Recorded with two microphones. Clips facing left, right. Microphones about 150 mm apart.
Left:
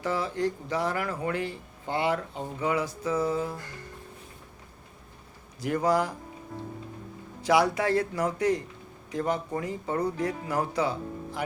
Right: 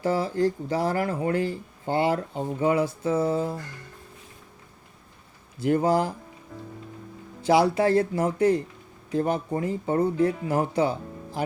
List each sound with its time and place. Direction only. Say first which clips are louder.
0.0 s speech: right 5 dB; 35° right (ahead or behind)
5.5 s speech: right 3 dB; 30° right (ahead or behind)
7.4 s speech: right 4 dB; 30° right (ahead or behind)